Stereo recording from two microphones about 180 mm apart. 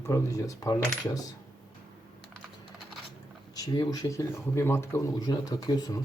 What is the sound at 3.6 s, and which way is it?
Speech, 20° left (ahead or behind).